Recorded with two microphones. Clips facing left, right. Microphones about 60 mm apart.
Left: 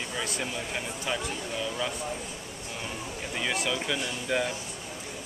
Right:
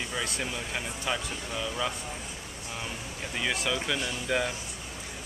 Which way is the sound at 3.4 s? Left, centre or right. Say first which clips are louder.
Even; centre.